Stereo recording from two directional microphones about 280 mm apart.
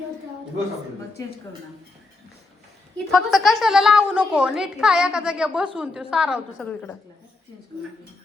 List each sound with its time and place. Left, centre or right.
3.1 s a woman's voice: centre